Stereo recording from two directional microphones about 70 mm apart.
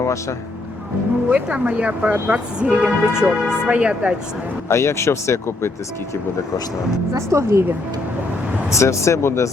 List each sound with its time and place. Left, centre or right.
0.0 s speech: left
1.3 s speech: centre
4.7 s speech: left
7.1 s speech: right
8.7 s speech: left